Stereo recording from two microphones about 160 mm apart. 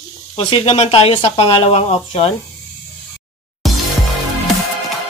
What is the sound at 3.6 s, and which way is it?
Music, centre (ahead or behind).